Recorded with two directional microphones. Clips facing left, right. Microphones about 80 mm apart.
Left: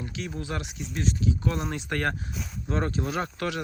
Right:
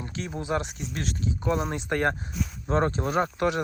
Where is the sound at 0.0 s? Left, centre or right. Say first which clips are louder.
Right 1 dB; right.